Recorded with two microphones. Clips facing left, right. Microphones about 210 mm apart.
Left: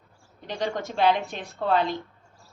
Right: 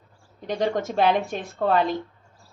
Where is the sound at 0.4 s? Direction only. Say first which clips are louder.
Right 5 dB; 45° right (ahead or behind).